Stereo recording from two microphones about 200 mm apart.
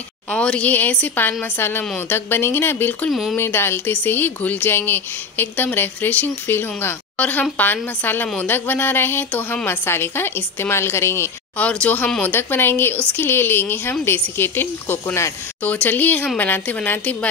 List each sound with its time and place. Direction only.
0.3 s speech: 5° left (ahead or behind)